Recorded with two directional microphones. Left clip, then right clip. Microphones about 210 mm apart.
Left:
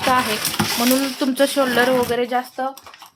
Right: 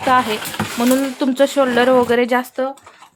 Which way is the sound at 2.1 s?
30° right (ahead or behind).